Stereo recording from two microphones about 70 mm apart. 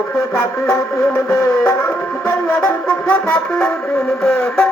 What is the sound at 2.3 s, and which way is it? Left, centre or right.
Music, left.